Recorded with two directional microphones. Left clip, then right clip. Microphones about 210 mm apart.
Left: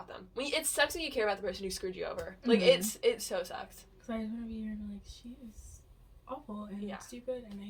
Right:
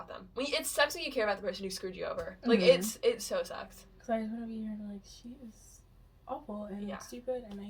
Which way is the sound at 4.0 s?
20° right (ahead or behind).